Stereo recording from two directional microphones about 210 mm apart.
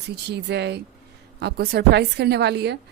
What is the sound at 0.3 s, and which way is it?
Speech, 55° right (ahead or behind).